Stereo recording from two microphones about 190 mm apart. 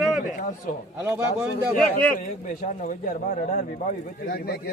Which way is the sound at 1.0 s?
10° right (ahead or behind).